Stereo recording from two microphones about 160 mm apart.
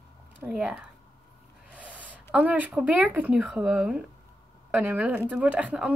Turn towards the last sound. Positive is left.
turn(degrees=-5)  # may be behind; listen again after turning